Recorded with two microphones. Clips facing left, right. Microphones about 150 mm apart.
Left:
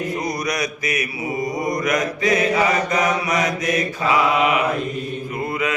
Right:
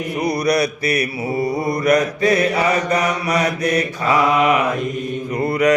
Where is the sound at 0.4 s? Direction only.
35° right (ahead or behind).